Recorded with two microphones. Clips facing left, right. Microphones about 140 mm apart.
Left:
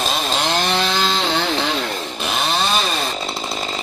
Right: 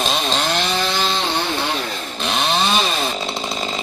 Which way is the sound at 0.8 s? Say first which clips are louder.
Left 1 dB; 90° left.